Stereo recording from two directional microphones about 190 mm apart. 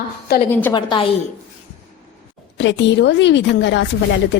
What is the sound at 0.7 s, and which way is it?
Speech, 25° left (ahead or behind).